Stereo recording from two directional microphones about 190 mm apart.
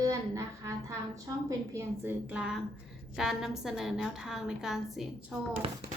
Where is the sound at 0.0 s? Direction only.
15° right (ahead or behind).